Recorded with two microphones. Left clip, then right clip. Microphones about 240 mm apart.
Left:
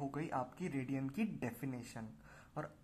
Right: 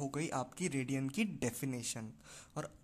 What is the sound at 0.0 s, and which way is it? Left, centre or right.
Speech, right.